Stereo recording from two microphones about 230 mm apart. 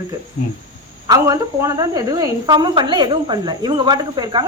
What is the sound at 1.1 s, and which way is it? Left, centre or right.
A woman's voice, centre.